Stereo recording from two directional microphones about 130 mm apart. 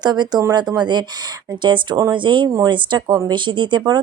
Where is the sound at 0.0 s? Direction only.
35° right (ahead or behind).